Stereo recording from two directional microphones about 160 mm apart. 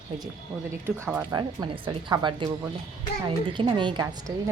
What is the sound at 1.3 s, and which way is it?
A woman's voice, 25° right (ahead or behind).